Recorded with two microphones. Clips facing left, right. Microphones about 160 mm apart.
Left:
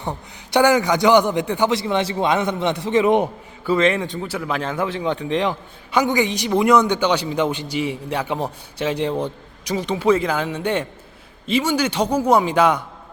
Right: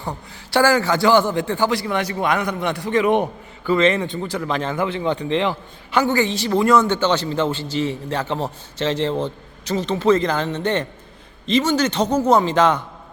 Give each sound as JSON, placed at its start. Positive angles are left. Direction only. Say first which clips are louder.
{"t": 0.5, "sound": "a man's voice", "louder": "left 1 dB", "side_deg": 20}
{"t": 3.7, "sound": "a man's voice", "louder": "right 1 dB", "side_deg": 5}
{"t": 5.9, "sound": "a man's voice", "louder": "even", "side_deg": 15}